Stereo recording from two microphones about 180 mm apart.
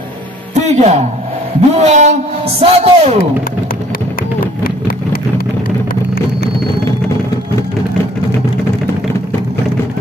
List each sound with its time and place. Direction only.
0.6 s speech: 40° right (ahead or behind)
4.6 s vehicle: 55° left (ahead or behind)